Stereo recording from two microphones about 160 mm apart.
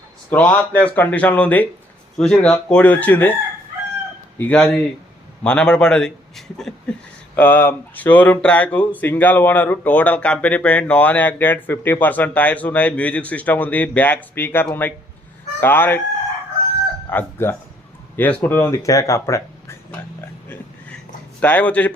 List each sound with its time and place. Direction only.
0.3 s speech: 10° left (ahead or behind)
4.4 s a man's voice: 10° left (ahead or behind)
17.1 s speech: 15° left (ahead or behind)
21.4 s speech: 10° left (ahead or behind)